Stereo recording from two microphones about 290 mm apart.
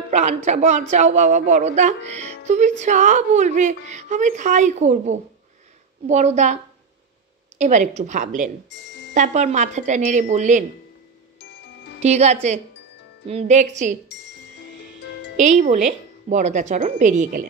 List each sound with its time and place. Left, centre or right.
0.1 s a woman's voice: right
8.7 s music: left
9.1 s a woman's voice: right
12.0 s a woman's voice: right
14.0 s music: left
15.3 s a woman's voice: right